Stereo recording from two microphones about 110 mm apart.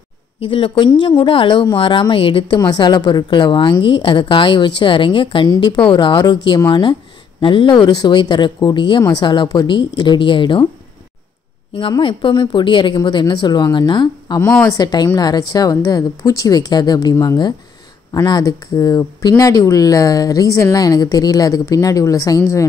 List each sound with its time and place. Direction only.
0.5 s a woman's voice: 50° left (ahead or behind)
2.6 s a woman's voice: 40° left (ahead or behind)
5.5 s a woman's voice: 40° left (ahead or behind)
12.0 s a woman's voice: 50° left (ahead or behind); by 22.7 s 30° left (ahead or behind)